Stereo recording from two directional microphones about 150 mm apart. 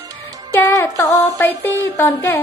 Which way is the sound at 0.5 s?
15° left (ahead or behind).